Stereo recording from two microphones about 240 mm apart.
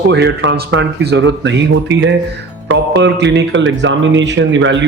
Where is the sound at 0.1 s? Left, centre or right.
Right.